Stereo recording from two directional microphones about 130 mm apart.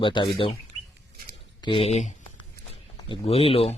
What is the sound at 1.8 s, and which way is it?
Speech, 60° left (ahead or behind).